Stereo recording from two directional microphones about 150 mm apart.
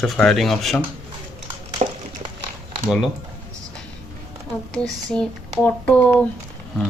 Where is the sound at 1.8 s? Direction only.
50° right (ahead or behind).